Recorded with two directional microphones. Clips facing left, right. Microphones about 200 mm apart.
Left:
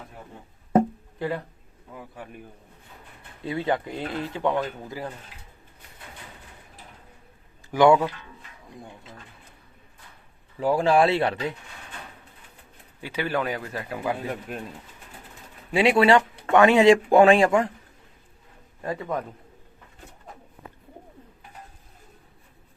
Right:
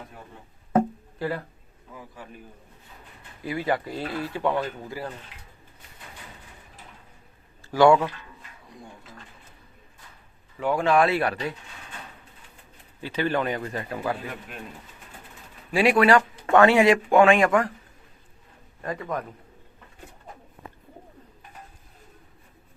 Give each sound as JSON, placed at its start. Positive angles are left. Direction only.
{"t": 1.2, "sound": "speech", "side_deg": 20}
{"t": 3.4, "sound": "speech", "side_deg": 25}
{"t": 7.7, "sound": "speech", "side_deg": 15}
{"t": 10.6, "sound": "speech", "side_deg": 35}
{"t": 13.0, "sound": "speech", "side_deg": 10}
{"t": 14.5, "sound": "speech", "side_deg": 40}
{"t": 15.7, "sound": "speech", "side_deg": 25}
{"t": 18.8, "sound": "a man's voice", "side_deg": 5}